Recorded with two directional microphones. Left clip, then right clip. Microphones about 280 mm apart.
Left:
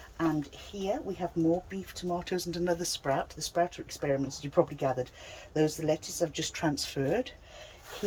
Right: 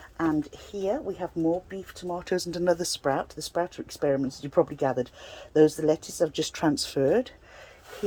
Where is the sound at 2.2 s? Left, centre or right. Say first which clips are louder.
Right 9 dB; centre.